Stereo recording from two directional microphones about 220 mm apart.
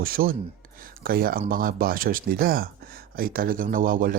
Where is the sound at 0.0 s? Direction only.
40° right (ahead or behind).